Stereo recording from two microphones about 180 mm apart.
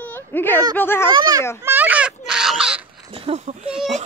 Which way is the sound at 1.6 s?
10° right (ahead or behind).